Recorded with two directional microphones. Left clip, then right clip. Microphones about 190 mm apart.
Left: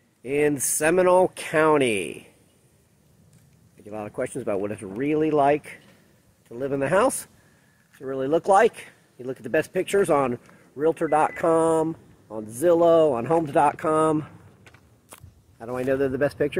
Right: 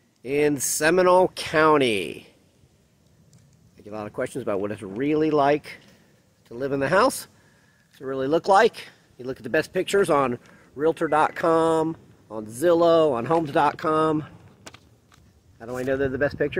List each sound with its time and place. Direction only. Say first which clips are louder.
0.2 s speech: even; 5° right (ahead or behind)
3.8 s speech: even; 5° right (ahead or behind)
15.6 s speech: left 1 dB; 15° left (ahead or behind)